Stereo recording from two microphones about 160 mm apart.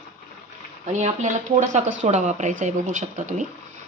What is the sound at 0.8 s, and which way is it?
Speech, 45° right (ahead or behind).